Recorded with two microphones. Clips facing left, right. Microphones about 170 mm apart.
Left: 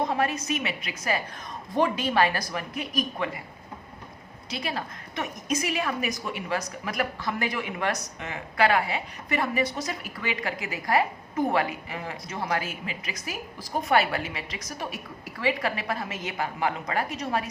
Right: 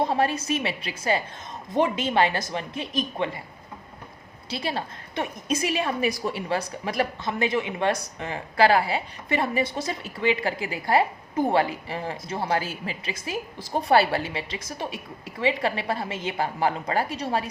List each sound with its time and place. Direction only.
0.0 s a woman's voice: 30° right (ahead or behind)
4.4 s a woman's voice: 30° right (ahead or behind)